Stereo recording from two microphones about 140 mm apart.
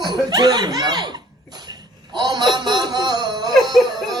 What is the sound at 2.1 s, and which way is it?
Music, 30° right (ahead or behind).